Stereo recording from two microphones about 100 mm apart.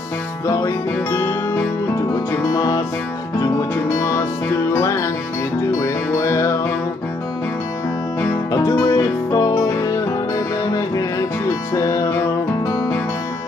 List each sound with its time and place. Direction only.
0.5 s music: 30° left (ahead or behind)
2.5 s music: 40° left (ahead or behind)
4.0 s music: 30° left (ahead or behind)
8.5 s music: 35° left (ahead or behind)